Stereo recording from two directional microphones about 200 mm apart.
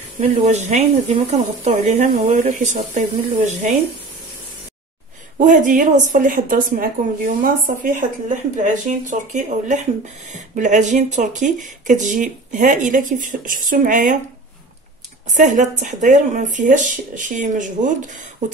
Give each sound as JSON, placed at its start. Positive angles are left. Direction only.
{"t": 0.2, "sound": "a woman's voice", "side_deg": -35}
{"t": 5.4, "sound": "a woman's voice", "side_deg": -40}
{"t": 15.2, "sound": "a woman's voice", "side_deg": -40}